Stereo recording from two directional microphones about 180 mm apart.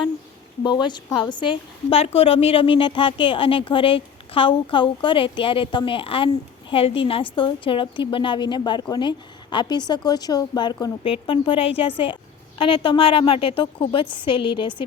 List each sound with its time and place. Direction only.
0.6 s a woman's voice: 25° left (ahead or behind)